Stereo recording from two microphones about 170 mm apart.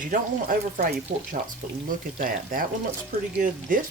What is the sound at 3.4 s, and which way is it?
Speech, 55° right (ahead or behind).